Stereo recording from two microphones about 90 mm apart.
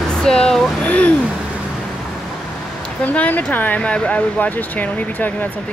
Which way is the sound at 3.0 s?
15° left (ahead or behind).